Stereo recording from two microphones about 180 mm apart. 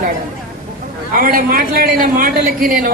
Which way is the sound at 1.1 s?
50° right (ahead or behind).